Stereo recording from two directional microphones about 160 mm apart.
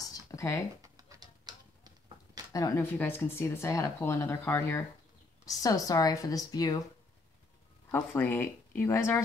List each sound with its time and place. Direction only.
0.0 s a sound: 20° left (ahead or behind)
0.8 s typewriter: 20° right (ahead or behind)
2.5 s speech: 20° left (ahead or behind)
7.9 s speech: 15° left (ahead or behind)